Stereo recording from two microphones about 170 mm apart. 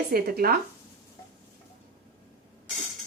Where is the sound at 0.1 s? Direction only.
60° right (ahead or behind).